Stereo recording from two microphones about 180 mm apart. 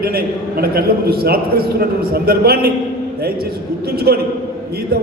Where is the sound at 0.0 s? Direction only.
55° right (ahead or behind).